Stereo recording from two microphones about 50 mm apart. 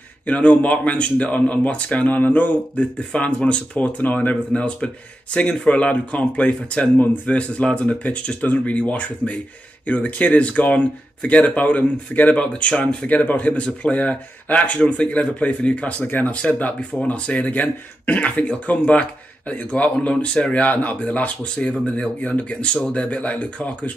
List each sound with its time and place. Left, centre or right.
0.3 s speech: left
2.7 s speech: left
3.7 s speech: left
4.6 s speech: left
16.1 s speech: left
20.6 s speech: left